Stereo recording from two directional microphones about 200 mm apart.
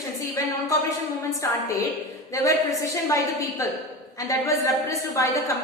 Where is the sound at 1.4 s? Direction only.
15° left (ahead or behind).